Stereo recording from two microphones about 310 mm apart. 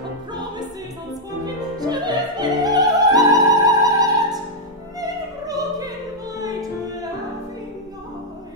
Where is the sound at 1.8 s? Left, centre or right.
Centre.